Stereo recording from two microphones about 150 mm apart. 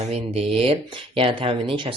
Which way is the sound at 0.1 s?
40° right (ahead or behind).